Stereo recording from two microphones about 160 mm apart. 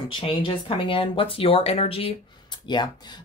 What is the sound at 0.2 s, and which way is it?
Speech, 35° left (ahead or behind).